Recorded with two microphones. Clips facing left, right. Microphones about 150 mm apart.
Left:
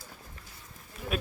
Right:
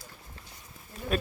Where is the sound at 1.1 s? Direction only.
Centre (ahead or behind).